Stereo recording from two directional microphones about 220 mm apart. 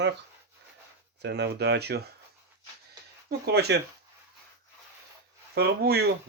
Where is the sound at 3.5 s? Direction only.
50° right (ahead or behind).